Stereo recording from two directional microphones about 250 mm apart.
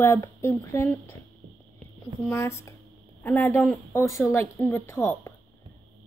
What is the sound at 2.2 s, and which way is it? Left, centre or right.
A woman's voice, centre.